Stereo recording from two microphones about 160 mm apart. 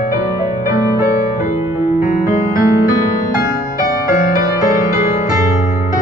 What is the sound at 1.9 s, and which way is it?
Music, 50° left (ahead or behind).